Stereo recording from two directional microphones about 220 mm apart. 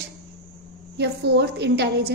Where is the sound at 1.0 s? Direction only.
50° right (ahead or behind).